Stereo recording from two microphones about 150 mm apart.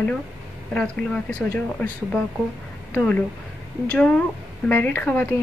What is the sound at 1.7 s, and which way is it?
A woman's voice, 10° left (ahead or behind).